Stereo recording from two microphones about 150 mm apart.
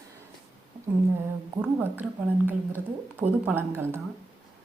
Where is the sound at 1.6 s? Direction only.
10° right (ahead or behind).